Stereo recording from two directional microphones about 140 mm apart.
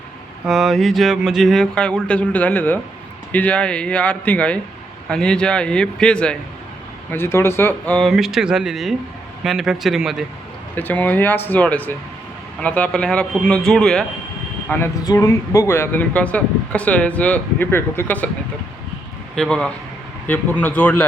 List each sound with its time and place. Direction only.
0.4 s speech: centre (ahead or behind)
8.1 s speech: centre (ahead or behind)
10.8 s speech: 10° left (ahead or behind)
15.0 s speech: 25° left (ahead or behind)
19.4 s speech: 5° left (ahead or behind)